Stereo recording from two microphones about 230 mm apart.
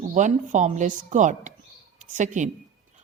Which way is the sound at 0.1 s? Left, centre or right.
Right.